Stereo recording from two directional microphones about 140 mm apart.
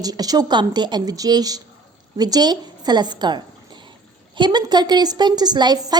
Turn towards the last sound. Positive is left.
turn(degrees=-30)  # may be behind; listen again after turning